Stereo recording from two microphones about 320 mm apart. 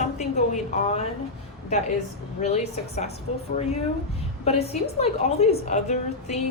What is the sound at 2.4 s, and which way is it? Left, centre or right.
A woman's voice, left.